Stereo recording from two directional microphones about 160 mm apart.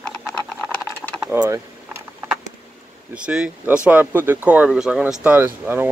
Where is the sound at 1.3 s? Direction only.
10° right (ahead or behind).